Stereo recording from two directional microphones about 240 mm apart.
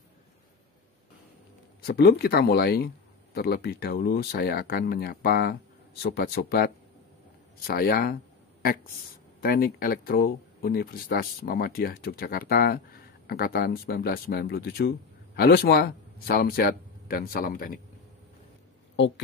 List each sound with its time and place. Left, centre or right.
1.9 s speech: left
9.4 s speech: left
18.9 s speech: left